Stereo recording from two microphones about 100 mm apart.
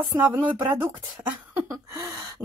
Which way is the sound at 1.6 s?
35° right (ahead or behind).